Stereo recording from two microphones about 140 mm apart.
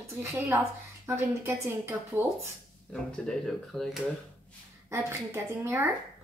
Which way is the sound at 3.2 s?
5° left (ahead or behind).